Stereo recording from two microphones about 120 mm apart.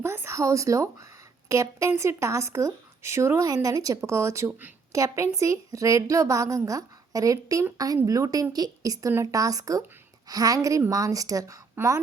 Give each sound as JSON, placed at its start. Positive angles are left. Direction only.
{"t": 0.0, "sound": "speech", "side_deg": -20}